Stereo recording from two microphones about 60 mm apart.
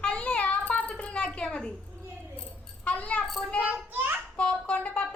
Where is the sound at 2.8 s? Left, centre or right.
Left.